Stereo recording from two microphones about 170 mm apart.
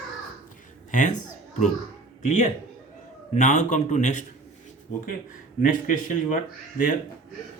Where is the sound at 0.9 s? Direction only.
45° left (ahead or behind).